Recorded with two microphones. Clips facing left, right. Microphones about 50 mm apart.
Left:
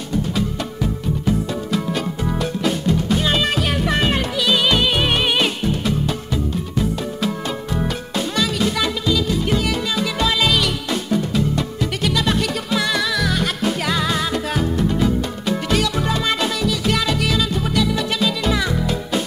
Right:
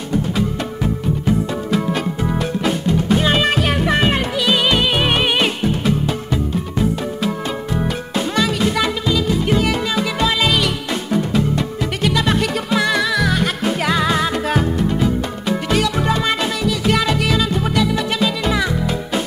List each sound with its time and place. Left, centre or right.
1.2 s music: right